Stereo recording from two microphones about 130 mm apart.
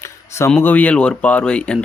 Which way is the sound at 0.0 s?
20° left (ahead or behind).